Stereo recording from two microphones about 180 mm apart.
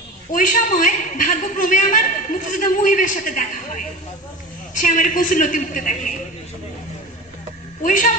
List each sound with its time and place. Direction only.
0.3 s a man's voice: 45° left (ahead or behind)
7.8 s a man's voice: 45° left (ahead or behind)